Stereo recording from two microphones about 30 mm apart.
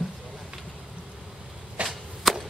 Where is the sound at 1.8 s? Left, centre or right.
Right.